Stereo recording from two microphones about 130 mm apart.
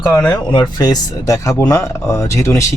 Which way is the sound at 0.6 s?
30° left (ahead or behind).